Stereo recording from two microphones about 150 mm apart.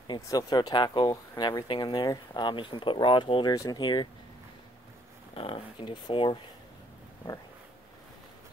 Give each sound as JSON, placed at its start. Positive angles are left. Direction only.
{"t": 0.0, "sound": "speech", "side_deg": 25}
{"t": 5.3, "sound": "speech", "side_deg": 35}